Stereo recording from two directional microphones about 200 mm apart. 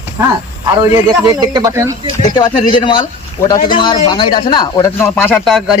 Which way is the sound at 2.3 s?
25° left (ahead or behind).